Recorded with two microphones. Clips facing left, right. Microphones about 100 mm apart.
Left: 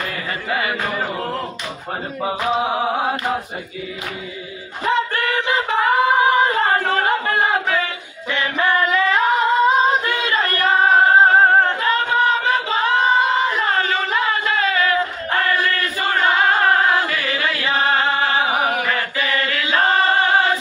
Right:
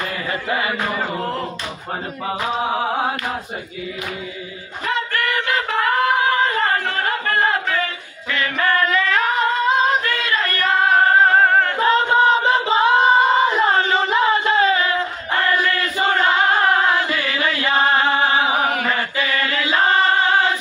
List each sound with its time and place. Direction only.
4.8 s a sound: 25° left (ahead or behind)
8.3 s singing: 25° left (ahead or behind)
10.1 s female singing: 25° left (ahead or behind)
10.6 s singing: 15° left (ahead or behind)
11.8 s a sound: 30° right (ahead or behind)
18.1 s music: 25° right (ahead or behind)